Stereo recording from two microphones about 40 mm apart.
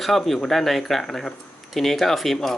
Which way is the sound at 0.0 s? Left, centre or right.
Centre.